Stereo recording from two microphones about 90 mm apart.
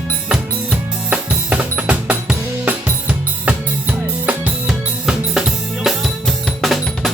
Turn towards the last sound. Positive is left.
turn(degrees=0)  # may be behind; listen again after turning